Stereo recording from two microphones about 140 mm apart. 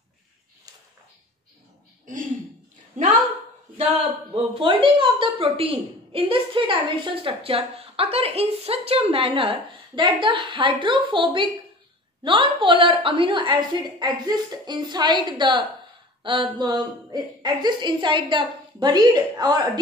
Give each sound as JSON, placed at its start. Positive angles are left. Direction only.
{"t": 4.4, "sound": "a woman's voice", "side_deg": -40}